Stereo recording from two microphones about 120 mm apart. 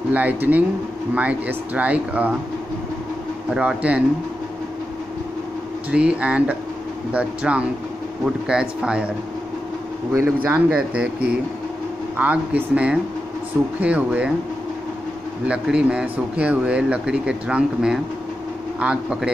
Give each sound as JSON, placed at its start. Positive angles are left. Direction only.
{"t": 0.1, "sound": "speech", "side_deg": -15}
{"t": 3.4, "sound": "speech", "side_deg": -10}
{"t": 5.9, "sound": "speech", "side_deg": -10}
{"t": 10.1, "sound": "speech", "side_deg": -20}
{"t": 10.7, "sound": "speech", "side_deg": -10}
{"t": 15.4, "sound": "speech", "side_deg": -10}